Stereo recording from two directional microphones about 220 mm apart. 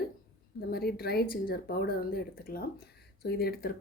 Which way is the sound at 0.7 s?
45° left (ahead or behind).